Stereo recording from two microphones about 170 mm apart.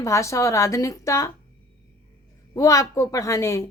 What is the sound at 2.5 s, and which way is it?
A woman's voice, 20° left (ahead or behind).